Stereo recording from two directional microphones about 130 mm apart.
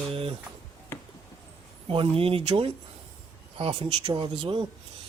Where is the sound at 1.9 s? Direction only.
45° right (ahead or behind).